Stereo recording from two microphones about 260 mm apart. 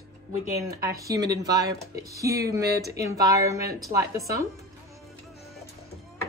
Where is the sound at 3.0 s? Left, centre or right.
Centre.